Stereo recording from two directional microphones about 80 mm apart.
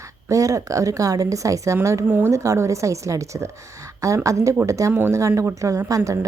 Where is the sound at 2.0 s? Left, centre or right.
Right.